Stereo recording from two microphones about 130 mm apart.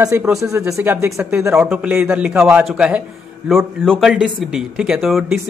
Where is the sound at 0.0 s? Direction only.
20° right (ahead or behind).